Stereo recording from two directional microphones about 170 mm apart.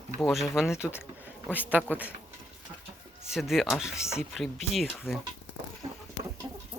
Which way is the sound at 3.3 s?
Centre (ahead or behind).